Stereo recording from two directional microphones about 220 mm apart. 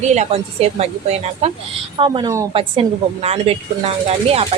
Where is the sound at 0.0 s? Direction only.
30° right (ahead or behind).